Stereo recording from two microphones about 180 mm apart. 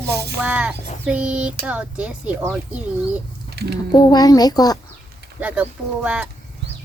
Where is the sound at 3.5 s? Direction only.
65° right (ahead or behind).